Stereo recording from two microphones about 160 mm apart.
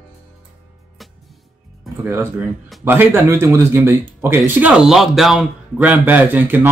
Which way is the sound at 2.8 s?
15° right (ahead or behind).